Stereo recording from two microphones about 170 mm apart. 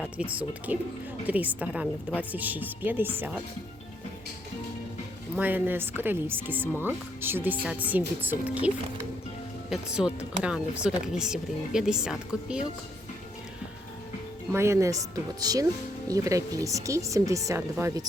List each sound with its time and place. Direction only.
0.3 s speech: 10° right (ahead or behind)
5.4 s speech: 10° right (ahead or behind)
14.5 s speech: 15° right (ahead or behind)